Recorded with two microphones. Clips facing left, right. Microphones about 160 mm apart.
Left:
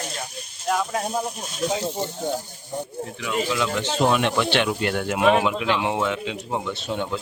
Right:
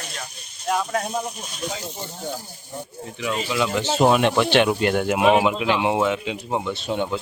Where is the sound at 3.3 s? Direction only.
10° right (ahead or behind).